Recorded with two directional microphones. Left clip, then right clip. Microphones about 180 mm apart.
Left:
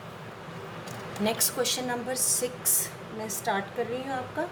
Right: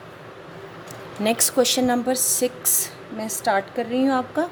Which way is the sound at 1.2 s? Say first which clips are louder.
Right 8 dB; 50° right (ahead or behind).